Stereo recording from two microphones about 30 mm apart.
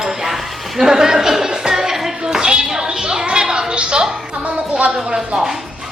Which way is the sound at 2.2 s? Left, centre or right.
Right.